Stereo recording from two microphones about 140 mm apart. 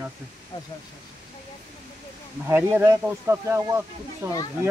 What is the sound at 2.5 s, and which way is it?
Speech, 15° right (ahead or behind).